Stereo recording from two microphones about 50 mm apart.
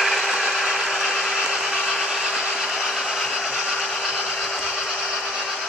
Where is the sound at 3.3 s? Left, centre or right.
Centre.